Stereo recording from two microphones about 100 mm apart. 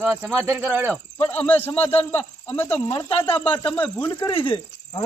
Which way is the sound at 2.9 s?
50° left (ahead or behind).